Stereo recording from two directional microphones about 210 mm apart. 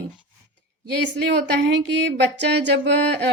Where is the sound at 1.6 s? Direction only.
55° right (ahead or behind).